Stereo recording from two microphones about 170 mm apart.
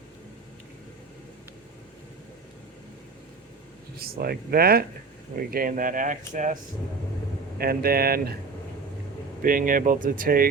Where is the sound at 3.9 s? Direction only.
60° right (ahead or behind).